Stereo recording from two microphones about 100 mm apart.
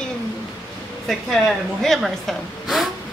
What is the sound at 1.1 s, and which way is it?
Speech, centre (ahead or behind).